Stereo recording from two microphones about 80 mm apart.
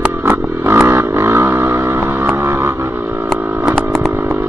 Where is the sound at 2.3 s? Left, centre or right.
Right.